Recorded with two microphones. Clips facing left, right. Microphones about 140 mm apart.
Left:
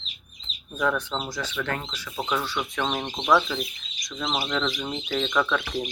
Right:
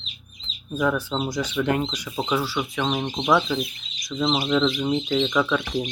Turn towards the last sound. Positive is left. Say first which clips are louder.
# right 3 dB
turn(degrees=-5)  # may be behind; listen again after turning